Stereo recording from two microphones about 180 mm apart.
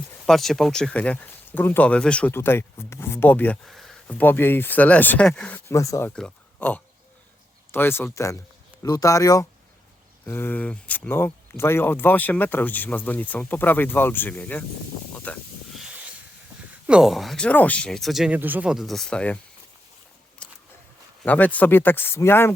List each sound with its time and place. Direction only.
0.3 s speech: centre (ahead or behind)
15.2 s snake: 10° left (ahead or behind)
16.8 s speech: 5° right (ahead or behind)
21.2 s speech: 10° left (ahead or behind)